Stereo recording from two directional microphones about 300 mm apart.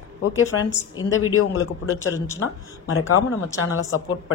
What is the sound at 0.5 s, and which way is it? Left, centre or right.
Speech, left.